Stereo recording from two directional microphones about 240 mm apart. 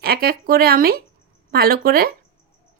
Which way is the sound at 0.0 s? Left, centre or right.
Right.